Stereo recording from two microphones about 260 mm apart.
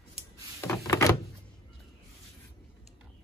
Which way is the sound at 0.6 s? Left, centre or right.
Centre.